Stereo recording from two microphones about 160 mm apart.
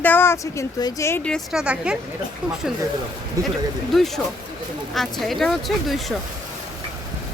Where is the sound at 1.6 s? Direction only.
5° right (ahead or behind).